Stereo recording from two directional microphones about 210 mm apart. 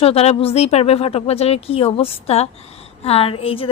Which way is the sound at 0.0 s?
30° left (ahead or behind).